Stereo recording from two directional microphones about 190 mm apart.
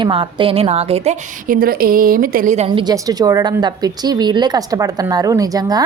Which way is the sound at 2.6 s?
25° right (ahead or behind).